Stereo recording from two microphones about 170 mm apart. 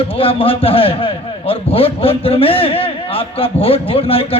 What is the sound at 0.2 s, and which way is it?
A man's voice, 35° left (ahead or behind).